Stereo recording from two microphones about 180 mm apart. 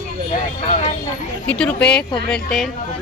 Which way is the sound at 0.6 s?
35° left (ahead or behind).